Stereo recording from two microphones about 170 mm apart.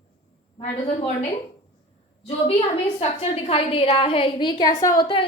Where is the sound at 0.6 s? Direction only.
40° left (ahead or behind).